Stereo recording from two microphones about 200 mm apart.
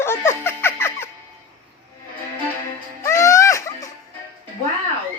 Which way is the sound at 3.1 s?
15° left (ahead or behind).